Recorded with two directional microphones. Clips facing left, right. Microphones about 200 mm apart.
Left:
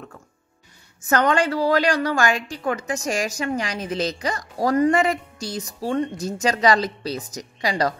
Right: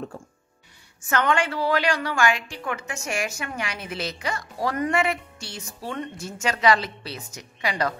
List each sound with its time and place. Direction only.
1.0 s a woman's voice: 40° left (ahead or behind)